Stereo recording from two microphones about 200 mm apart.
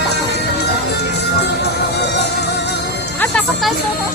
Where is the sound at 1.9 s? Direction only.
55° left (ahead or behind).